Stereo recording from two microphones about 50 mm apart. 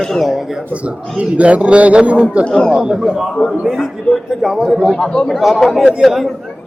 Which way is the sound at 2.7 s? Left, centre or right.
Centre.